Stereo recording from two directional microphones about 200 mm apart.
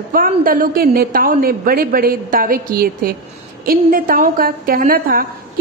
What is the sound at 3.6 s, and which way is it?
A woman's voice, 45° right (ahead or behind).